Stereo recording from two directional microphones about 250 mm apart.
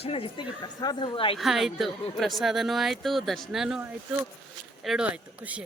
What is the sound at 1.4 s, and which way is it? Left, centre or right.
A woman's voice, centre.